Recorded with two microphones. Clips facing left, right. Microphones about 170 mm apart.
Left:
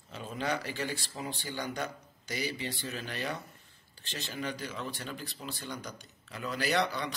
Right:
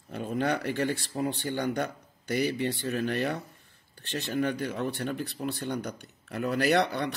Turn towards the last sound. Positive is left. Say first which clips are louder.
# right 6 dB
turn(degrees=-60)  # may be behind; listen again after turning